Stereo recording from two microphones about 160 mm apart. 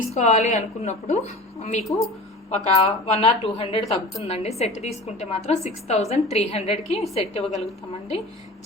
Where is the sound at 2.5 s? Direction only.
40° left (ahead or behind).